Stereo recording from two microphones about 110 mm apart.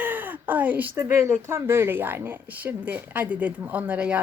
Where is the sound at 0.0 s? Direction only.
15° right (ahead or behind).